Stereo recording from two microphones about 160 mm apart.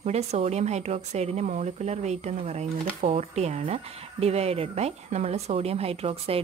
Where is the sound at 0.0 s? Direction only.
40° right (ahead or behind).